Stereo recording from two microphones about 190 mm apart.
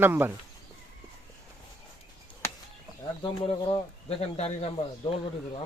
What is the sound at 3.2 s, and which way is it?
Speech, 30° left (ahead or behind).